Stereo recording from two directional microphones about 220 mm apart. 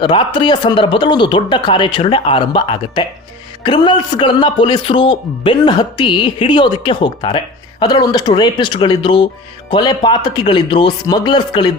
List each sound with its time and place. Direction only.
0.0 s a man's voice: 20° left (ahead or behind)